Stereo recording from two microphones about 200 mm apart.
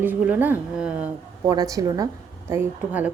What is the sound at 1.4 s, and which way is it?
A woman's voice, 20° right (ahead or behind).